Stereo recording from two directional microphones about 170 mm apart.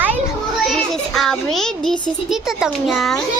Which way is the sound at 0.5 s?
Centre (ahead or behind).